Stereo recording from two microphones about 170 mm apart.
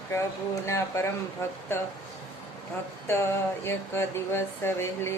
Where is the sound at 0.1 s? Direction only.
15° left (ahead or behind).